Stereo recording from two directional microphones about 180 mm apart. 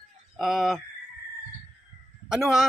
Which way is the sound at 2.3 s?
5° right (ahead or behind).